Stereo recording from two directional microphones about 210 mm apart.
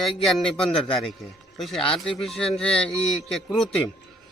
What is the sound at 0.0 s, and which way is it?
Speech, centre (ahead or behind).